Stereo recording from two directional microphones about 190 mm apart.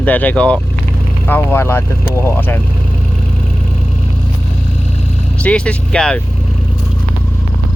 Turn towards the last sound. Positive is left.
turn(degrees=5)  # may be behind; listen again after turning